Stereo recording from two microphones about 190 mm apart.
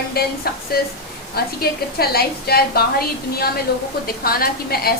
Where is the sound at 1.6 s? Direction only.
55° left (ahead or behind).